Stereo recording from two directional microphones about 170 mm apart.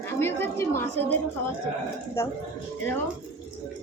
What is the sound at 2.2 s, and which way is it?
Speech, 15° left (ahead or behind).